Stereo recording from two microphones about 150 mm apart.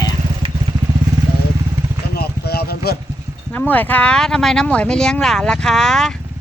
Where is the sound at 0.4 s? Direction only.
40° right (ahead or behind).